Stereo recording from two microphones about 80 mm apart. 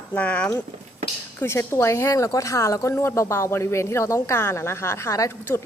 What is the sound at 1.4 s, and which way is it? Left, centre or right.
A woman's voice, left.